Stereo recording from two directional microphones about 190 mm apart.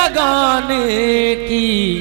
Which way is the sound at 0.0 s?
15° right (ahead or behind).